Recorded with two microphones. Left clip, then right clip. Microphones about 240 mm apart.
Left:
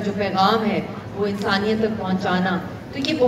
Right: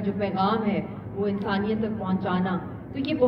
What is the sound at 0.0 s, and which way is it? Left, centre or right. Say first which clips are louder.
A woman's voice: left 6 dB; left.